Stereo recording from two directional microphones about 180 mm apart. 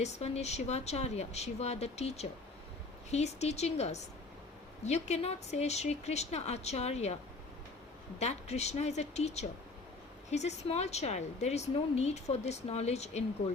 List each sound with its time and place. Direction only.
0.0 s a woman's voice: 35° left (ahead or behind)
8.2 s a woman's voice: 40° left (ahead or behind)